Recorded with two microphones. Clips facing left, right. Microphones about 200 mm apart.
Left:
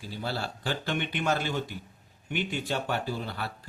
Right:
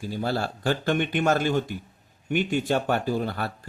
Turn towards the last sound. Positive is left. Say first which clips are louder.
# right 7 dB
turn(degrees=-50)  # may be behind; listen again after turning